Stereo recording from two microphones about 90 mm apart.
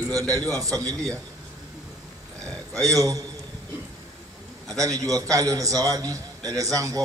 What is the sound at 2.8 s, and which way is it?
Speech, 40° right (ahead or behind).